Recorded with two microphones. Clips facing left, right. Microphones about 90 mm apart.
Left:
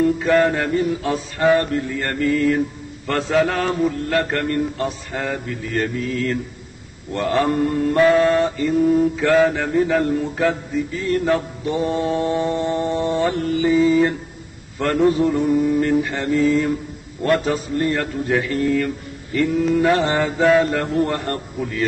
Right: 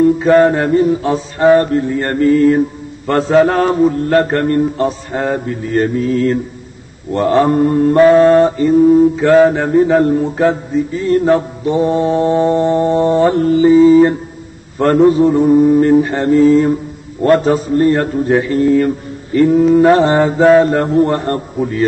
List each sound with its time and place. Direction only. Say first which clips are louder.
0.0 s mantra: right 7 dB; 30° right (ahead or behind)